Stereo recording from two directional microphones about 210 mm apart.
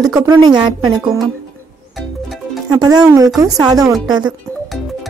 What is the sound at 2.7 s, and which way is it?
Speech, 20° right (ahead or behind).